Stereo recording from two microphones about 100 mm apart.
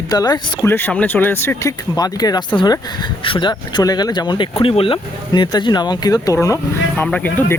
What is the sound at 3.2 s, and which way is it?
Speech, 55° left (ahead or behind).